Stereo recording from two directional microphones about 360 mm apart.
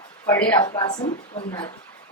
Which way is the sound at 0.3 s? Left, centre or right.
Centre.